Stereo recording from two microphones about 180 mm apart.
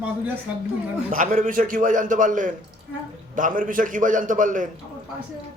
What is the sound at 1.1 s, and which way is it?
A man's voice, 45° right (ahead or behind).